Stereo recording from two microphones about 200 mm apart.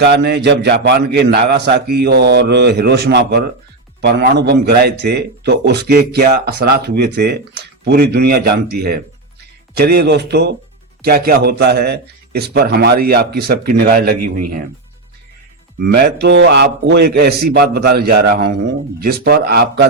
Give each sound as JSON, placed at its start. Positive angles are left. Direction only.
{"t": 0.0, "sound": "a man's voice", "side_deg": -55}
{"t": 16.0, "sound": "a man's voice", "side_deg": -55}